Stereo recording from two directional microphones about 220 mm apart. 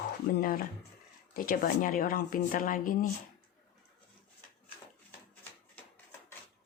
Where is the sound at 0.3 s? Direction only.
40° left (ahead or behind).